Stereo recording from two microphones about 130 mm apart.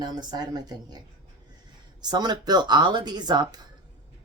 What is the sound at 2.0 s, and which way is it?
Speech, 30° right (ahead or behind).